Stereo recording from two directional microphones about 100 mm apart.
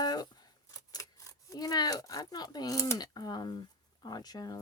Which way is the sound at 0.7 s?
35° left (ahead or behind).